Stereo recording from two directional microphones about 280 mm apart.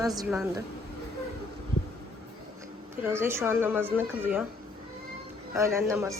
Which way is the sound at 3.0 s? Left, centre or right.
Centre.